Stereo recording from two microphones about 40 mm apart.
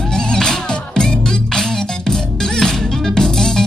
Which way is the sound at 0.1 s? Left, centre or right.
Centre.